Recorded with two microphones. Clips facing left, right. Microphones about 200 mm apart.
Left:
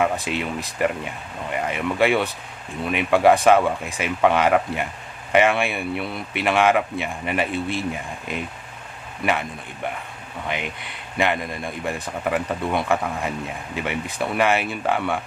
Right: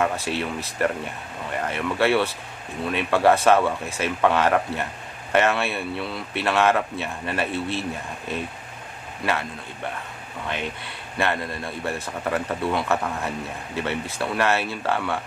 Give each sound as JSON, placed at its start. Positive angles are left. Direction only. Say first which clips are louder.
{"t": 0.0, "sound": "speech", "louder": "left 2 dB", "side_deg": 15}
{"t": 10.5, "sound": "speech", "louder": "even", "side_deg": 15}